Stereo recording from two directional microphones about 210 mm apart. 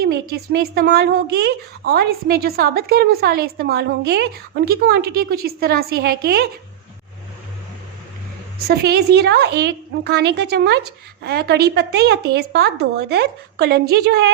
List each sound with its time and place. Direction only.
0.0 s a woman's voice: 50° right (ahead or behind)
8.5 s a woman's voice: 50° right (ahead or behind)